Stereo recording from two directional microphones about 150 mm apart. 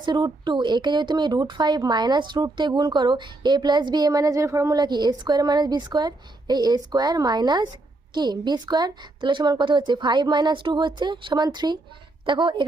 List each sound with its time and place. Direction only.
0.0 s a woman's voice: 30° right (ahead or behind)